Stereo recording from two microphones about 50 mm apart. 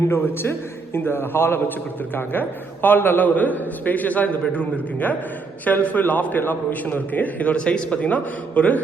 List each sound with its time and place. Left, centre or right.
0.1 s a man's voice: left
7.5 s a man's voice: left